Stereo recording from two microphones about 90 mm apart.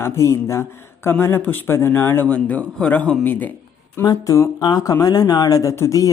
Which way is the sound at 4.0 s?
40° left (ahead or behind).